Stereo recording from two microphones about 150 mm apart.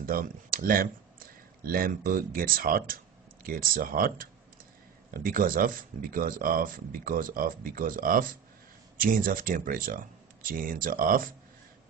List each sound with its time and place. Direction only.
0.0 s speech: 70° right (ahead or behind)